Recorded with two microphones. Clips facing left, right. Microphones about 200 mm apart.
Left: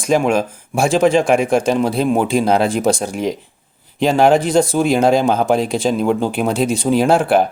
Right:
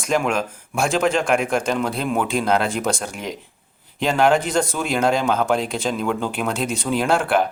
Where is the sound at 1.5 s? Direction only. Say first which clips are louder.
Left 6 dB; 30° left (ahead or behind).